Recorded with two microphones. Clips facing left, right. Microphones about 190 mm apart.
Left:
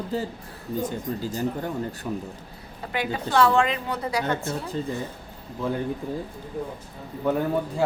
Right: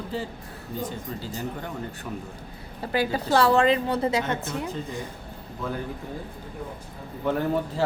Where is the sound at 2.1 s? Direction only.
25° left (ahead or behind).